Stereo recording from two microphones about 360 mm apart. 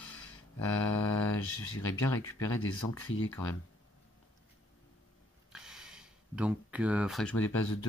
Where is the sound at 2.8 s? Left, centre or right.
Left.